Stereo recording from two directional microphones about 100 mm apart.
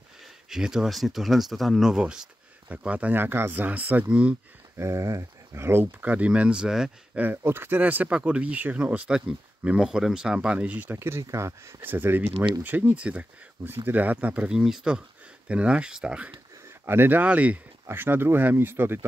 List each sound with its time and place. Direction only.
0.2 s speech: 5° right (ahead or behind)
4.7 s speech: 30° right (ahead or behind); by 6.9 s 5° right (ahead or behind)
7.2 s speech: 20° right (ahead or behind)
14.6 s speech: 5° right (ahead or behind)
16.6 s speech: 25° right (ahead or behind)